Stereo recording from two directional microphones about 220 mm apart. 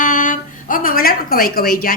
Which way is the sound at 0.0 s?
35° left (ahead or behind).